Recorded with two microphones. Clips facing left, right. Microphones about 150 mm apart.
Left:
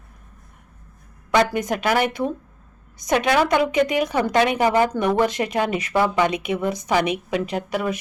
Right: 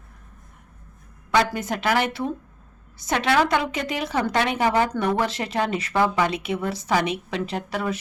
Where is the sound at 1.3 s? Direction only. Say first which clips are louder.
Left 3 dB; 15° left (ahead or behind).